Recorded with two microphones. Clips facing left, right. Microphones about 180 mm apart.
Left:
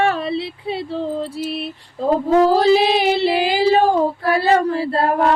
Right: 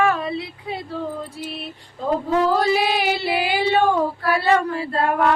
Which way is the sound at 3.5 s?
35° left (ahead or behind).